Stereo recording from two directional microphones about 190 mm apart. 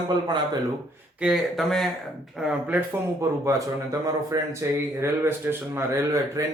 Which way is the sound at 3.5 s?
15° right (ahead or behind).